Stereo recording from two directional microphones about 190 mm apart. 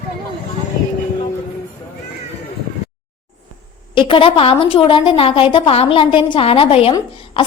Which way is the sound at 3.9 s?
30° left (ahead or behind).